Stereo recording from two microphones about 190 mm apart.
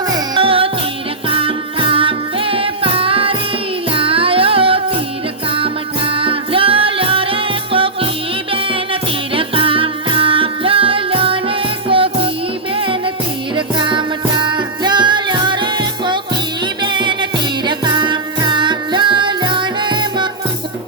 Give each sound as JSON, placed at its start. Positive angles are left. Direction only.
{"t": 0.1, "sound": "music", "side_deg": -30}